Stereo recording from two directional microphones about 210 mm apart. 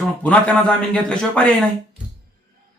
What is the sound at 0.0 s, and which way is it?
Speech, 5° left (ahead or behind).